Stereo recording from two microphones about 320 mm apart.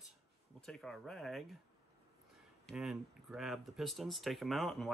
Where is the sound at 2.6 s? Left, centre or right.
Centre.